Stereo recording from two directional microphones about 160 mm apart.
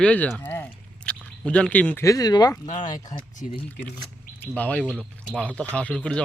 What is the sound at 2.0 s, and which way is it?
Speech, 25° left (ahead or behind).